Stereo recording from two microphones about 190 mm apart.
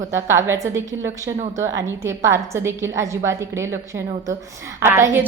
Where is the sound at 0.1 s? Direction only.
15° right (ahead or behind).